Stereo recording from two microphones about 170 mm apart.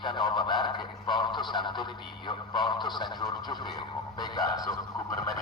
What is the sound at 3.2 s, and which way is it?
A man's voice, 25° left (ahead or behind).